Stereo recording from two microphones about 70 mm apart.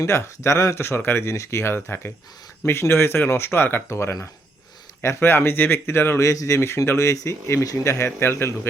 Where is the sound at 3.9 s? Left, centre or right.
Left.